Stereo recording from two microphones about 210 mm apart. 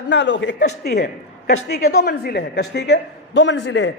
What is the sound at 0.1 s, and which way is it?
A man's voice, 60° left (ahead or behind).